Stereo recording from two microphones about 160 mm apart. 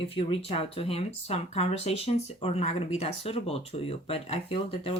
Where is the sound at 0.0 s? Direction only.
35° left (ahead or behind).